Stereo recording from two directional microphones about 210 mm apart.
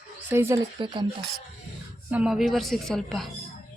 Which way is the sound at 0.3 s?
10° right (ahead or behind).